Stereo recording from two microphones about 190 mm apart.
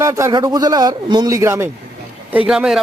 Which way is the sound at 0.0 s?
15° right (ahead or behind).